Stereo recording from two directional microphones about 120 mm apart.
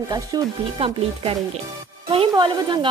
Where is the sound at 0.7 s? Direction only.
50° right (ahead or behind).